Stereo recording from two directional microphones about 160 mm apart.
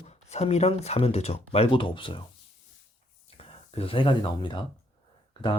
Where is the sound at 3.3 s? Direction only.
35° left (ahead or behind).